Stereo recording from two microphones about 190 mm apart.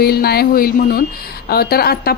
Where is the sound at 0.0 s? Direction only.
55° left (ahead or behind).